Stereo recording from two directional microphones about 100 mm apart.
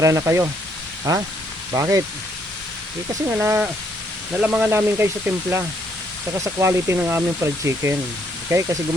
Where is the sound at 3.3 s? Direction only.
25° right (ahead or behind).